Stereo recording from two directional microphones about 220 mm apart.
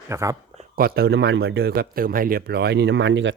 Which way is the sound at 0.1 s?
15° right (ahead or behind).